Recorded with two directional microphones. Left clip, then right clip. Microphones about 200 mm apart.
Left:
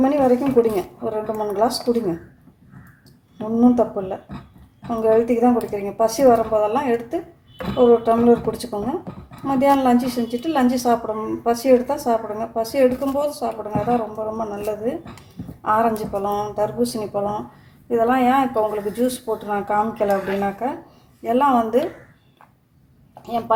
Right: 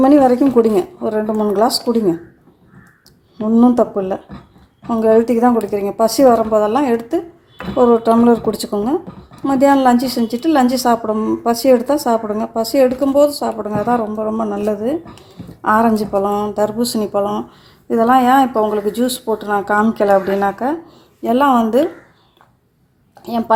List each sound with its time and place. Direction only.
0.0 s speech: 45° right (ahead or behind)
3.6 s a woman's voice: 45° right (ahead or behind)
23.2 s a woman's voice: 40° right (ahead or behind)